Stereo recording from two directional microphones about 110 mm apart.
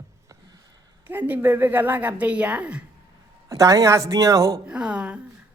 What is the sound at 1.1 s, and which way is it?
A woman's voice, 15° right (ahead or behind).